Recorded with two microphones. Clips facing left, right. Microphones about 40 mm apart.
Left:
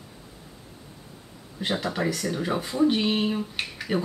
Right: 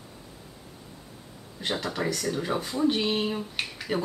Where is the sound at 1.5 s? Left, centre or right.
Centre.